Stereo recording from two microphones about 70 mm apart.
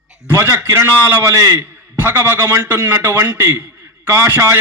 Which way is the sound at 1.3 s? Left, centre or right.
Right.